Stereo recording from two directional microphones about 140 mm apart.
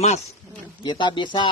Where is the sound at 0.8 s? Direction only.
35° left (ahead or behind).